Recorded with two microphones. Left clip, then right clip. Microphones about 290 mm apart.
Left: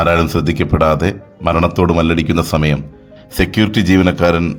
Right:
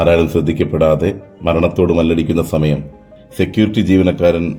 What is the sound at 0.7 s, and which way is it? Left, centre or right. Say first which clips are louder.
Speech: even; left.